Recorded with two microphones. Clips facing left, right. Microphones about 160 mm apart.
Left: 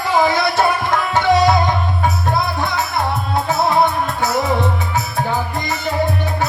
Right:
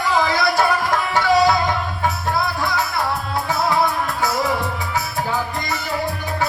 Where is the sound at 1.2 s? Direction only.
20° left (ahead or behind).